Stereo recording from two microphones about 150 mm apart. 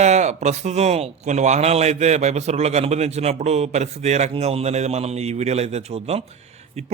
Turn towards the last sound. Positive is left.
turn(degrees=-45)  # may be behind; listen again after turning